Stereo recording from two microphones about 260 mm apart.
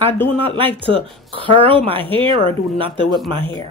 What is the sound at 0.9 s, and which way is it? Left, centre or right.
A woman's voice, right.